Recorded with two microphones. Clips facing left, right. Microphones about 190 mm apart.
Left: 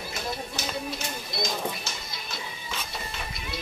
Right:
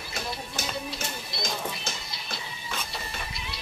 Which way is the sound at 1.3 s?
50° left (ahead or behind).